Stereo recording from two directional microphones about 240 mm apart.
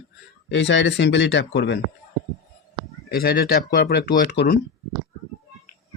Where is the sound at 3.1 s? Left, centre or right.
Left.